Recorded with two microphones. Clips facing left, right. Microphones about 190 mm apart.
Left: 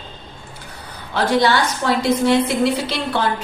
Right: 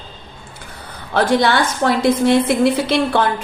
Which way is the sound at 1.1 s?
55° right (ahead or behind).